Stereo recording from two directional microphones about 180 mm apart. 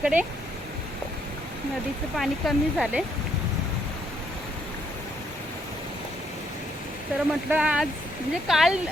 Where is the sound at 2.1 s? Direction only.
Centre (ahead or behind).